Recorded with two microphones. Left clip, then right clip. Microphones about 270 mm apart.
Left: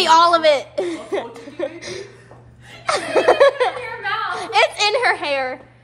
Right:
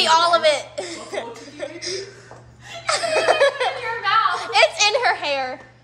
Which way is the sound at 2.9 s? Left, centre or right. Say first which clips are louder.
Left 2 dB; centre.